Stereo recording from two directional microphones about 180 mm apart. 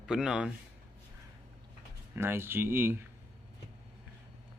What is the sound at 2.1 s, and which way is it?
Speech, 15° right (ahead or behind).